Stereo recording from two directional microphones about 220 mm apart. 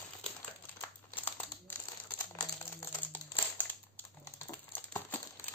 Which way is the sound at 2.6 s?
10° left (ahead or behind).